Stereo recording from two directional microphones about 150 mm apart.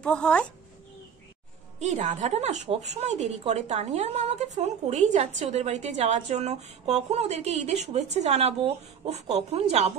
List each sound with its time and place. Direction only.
0.0 s speech: 5° left (ahead or behind)
1.8 s speech: 55° right (ahead or behind)